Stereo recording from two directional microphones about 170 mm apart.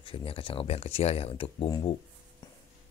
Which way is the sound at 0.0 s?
35° left (ahead or behind).